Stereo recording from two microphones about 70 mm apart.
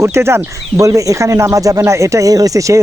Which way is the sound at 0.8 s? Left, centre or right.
Right.